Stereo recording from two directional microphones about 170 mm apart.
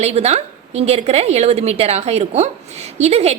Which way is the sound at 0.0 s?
40° right (ahead or behind).